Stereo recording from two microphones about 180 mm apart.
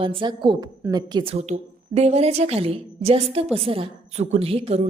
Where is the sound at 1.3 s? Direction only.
35° right (ahead or behind).